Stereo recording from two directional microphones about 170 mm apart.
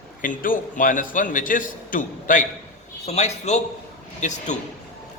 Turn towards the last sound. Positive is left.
turn(degrees=45)  # may be behind; listen again after turning